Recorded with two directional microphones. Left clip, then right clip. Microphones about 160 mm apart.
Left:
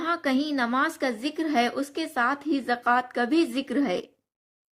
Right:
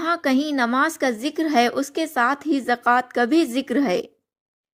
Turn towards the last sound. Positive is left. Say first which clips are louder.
# right 5 dB
turn(degrees=-40)  # may be behind; listen again after turning